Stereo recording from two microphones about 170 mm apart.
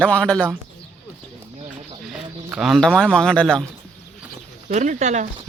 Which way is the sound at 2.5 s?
Centre (ahead or behind).